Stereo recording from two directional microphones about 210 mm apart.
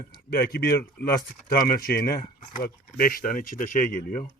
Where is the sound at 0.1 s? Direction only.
45° left (ahead or behind).